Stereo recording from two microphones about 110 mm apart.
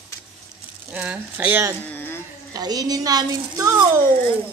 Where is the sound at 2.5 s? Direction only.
35° right (ahead or behind).